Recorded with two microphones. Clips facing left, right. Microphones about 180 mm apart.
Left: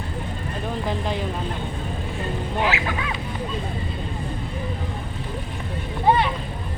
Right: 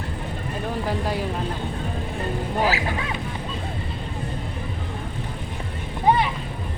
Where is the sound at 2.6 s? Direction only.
35° right (ahead or behind).